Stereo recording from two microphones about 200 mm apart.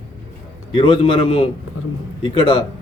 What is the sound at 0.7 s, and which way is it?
A man's voice, 25° left (ahead or behind).